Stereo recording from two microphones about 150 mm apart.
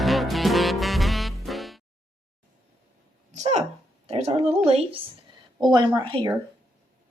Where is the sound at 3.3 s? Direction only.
50° right (ahead or behind).